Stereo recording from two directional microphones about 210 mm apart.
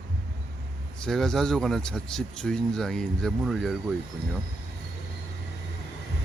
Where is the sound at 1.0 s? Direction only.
Centre (ahead or behind).